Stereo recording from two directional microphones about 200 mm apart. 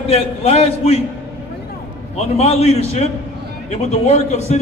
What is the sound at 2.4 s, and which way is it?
A man's voice, 30° left (ahead or behind).